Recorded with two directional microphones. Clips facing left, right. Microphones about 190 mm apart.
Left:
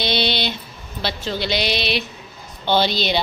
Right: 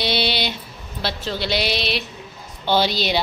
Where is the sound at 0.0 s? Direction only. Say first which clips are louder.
Left 1 dB; 10° right (ahead or behind).